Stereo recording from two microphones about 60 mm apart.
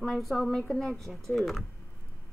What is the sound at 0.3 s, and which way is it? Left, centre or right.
Speech, centre.